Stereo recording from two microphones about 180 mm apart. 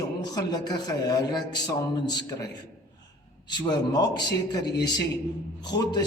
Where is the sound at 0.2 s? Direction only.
20° left (ahead or behind).